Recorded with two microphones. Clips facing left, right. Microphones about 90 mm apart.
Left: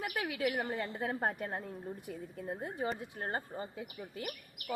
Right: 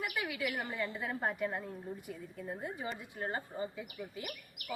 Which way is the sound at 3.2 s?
45° left (ahead or behind).